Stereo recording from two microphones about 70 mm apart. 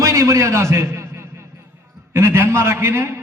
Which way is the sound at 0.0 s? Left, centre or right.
Right.